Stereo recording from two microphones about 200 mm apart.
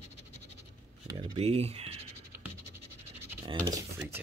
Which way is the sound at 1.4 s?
30° right (ahead or behind).